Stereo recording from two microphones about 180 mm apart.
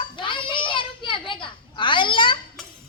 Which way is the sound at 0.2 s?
25° left (ahead or behind).